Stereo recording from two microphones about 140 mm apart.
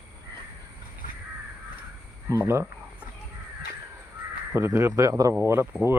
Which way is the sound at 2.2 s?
20° right (ahead or behind).